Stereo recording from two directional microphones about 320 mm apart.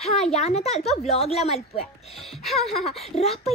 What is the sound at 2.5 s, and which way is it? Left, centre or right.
Speech, centre.